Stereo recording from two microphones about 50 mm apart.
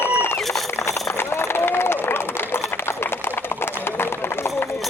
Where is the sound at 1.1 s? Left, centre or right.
Left.